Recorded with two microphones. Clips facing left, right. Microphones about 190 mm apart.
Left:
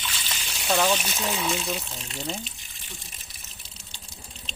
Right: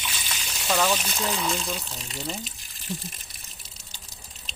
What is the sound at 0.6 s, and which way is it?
Speech, 10° left (ahead or behind).